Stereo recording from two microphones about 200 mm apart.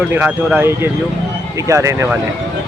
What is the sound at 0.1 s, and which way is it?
Speech, 10° right (ahead or behind).